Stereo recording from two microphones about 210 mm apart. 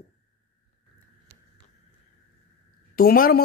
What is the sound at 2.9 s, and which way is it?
Speech, 45° left (ahead or behind).